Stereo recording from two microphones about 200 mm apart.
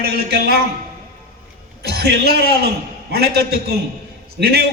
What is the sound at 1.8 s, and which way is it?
A man's voice, 55° right (ahead or behind).